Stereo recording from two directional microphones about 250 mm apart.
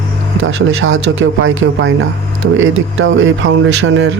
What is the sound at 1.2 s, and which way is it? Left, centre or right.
Speech, right.